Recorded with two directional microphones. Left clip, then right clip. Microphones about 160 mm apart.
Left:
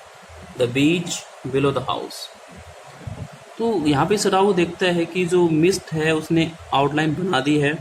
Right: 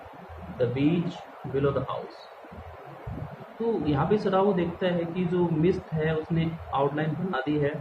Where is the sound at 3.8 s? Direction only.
65° left (ahead or behind).